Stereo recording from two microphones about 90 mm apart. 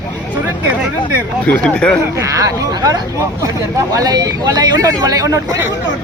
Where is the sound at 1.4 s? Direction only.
15° left (ahead or behind).